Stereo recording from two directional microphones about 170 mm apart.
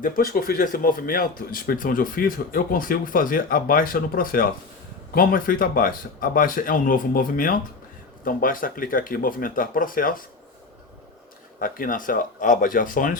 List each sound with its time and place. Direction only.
0.0 s speech: 55° left (ahead or behind)
11.6 s speech: 55° left (ahead or behind)